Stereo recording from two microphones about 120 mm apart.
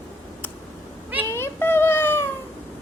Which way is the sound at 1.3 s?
20° left (ahead or behind).